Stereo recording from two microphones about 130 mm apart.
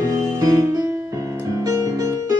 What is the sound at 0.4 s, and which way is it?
Music, 30° right (ahead or behind).